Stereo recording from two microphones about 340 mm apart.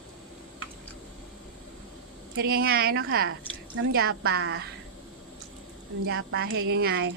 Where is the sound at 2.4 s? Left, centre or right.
Right.